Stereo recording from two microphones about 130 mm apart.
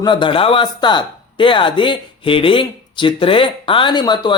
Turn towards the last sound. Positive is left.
turn(degrees=35)  # may be behind; listen again after turning